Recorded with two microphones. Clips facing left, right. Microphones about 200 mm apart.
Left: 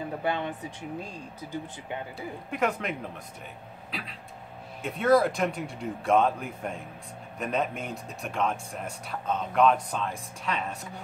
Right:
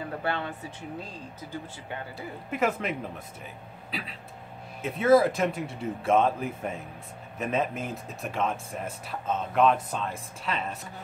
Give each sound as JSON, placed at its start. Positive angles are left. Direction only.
{"t": 0.2, "sound": "speech", "side_deg": 15}
{"t": 2.5, "sound": "speech", "side_deg": 0}